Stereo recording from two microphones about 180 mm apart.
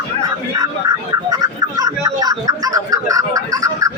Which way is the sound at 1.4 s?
20° right (ahead or behind).